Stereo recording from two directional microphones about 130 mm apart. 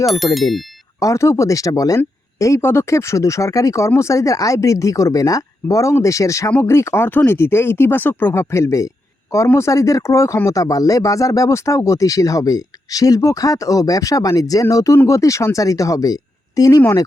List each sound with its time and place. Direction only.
0.0 s speech: centre (ahead or behind)
0.9 s speech: 25° left (ahead or behind)